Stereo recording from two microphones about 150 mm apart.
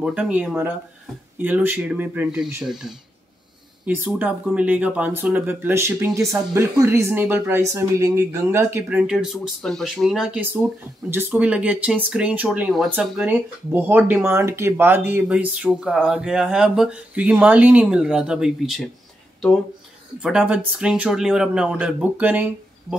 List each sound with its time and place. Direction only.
0.0 s speech: 5° right (ahead or behind)
3.8 s speech: 15° right (ahead or behind)
20.2 s speech: 5° right (ahead or behind)